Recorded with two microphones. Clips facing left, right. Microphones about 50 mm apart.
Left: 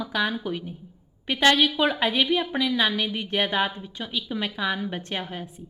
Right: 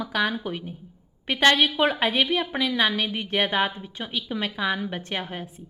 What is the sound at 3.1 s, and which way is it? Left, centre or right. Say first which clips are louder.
Speech: right 1 dB; right.